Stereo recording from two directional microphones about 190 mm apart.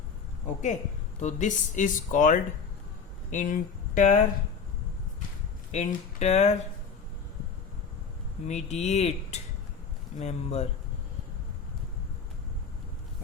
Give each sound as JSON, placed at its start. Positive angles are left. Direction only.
{"t": 0.4, "sound": "speech", "side_deg": 40}
{"t": 5.7, "sound": "speech", "side_deg": 35}
{"t": 8.4, "sound": "speech", "side_deg": 35}